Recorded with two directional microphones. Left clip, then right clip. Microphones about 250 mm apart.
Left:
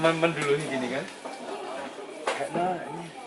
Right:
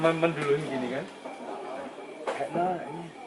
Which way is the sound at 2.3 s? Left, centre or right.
Centre.